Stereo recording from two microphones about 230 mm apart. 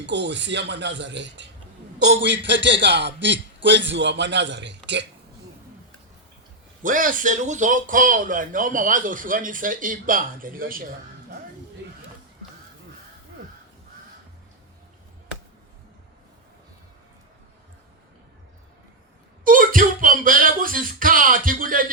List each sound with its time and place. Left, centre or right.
0.0 s a man's voice: right
6.8 s speech: right
11.8 s a sound: right
19.5 s speech: right